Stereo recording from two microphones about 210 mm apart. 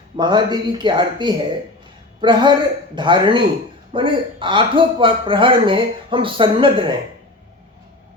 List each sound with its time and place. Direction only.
0.2 s a man's voice: 20° right (ahead or behind)